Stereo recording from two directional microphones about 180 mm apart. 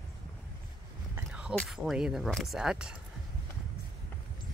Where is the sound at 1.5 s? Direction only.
Centre (ahead or behind).